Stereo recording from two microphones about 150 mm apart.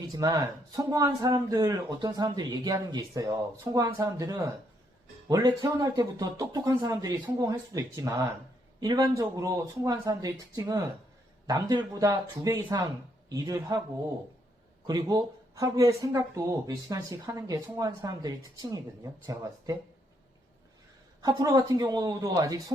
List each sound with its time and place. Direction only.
0.1 s speech: 25° right (ahead or behind)
14.8 s speech: 25° right (ahead or behind)
21.2 s speech: 25° right (ahead or behind)